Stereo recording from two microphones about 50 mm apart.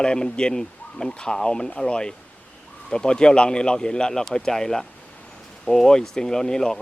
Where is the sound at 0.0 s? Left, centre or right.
Centre.